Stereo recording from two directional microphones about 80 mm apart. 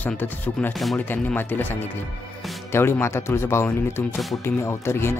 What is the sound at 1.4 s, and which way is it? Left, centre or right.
Speech, left.